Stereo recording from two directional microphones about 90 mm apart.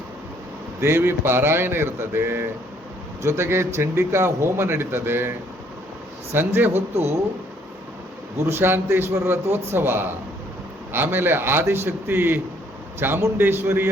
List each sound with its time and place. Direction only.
0.8 s speech: 25° right (ahead or behind)
6.3 s speech: 25° right (ahead or behind)
8.4 s speech: 25° right (ahead or behind)